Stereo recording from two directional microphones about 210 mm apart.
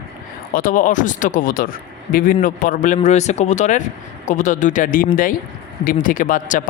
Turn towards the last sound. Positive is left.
turn(degrees=40)  # may be behind; listen again after turning